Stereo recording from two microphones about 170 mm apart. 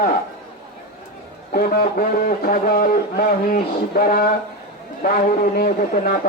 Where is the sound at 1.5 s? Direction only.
60° left (ahead or behind).